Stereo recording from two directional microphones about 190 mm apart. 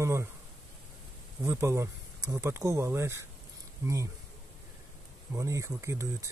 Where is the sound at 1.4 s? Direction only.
15° right (ahead or behind).